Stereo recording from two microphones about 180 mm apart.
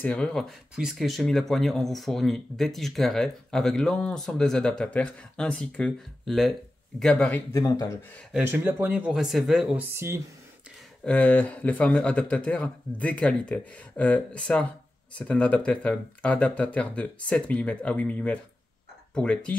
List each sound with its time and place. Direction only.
0.0 s speech: 5° left (ahead or behind)
7.5 s speech: 20° left (ahead or behind)
8.3 s speech: 10° right (ahead or behind)
11.1 s speech: 10° left (ahead or behind)